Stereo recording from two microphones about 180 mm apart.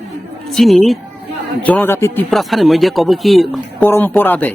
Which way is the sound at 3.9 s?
10° left (ahead or behind).